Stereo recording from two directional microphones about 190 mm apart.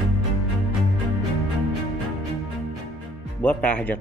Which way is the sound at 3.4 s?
10° left (ahead or behind).